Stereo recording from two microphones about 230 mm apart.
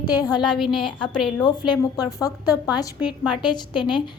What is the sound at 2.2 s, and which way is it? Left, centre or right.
A woman's voice, centre.